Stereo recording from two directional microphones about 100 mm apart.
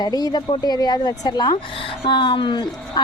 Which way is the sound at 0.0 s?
45° left (ahead or behind).